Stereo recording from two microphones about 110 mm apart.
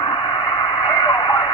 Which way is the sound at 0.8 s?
45° left (ahead or behind).